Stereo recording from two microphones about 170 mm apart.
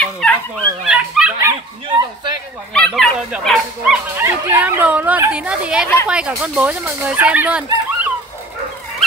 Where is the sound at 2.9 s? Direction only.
5° right (ahead or behind).